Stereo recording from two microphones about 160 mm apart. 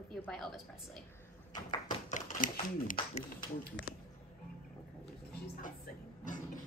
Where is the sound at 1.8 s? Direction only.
55° left (ahead or behind).